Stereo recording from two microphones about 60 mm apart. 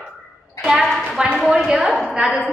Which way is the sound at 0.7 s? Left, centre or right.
Centre.